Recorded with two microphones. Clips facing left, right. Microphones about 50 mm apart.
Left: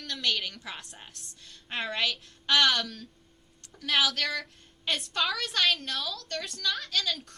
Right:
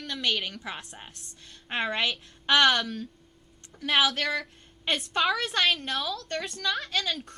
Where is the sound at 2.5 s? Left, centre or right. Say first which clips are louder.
Right 3 dB; centre.